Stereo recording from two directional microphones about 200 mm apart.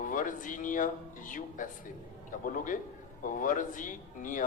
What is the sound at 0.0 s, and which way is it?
Speech, 40° left (ahead or behind).